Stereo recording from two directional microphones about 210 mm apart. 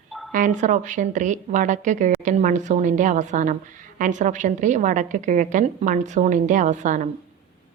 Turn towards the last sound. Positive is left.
turn(degrees=-35)  # may be behind; listen again after turning